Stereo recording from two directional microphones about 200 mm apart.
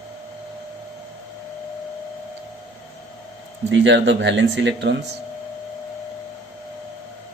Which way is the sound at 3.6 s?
65° right (ahead or behind).